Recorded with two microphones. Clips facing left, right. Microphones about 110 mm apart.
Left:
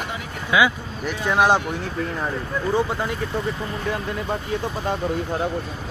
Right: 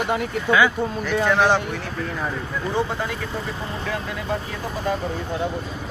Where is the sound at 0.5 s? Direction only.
10° left (ahead or behind).